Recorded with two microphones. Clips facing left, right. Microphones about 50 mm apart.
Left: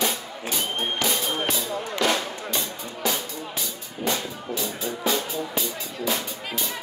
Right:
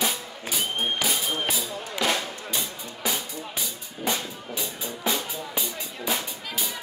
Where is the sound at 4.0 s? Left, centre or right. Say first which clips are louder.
Left 2 dB; centre.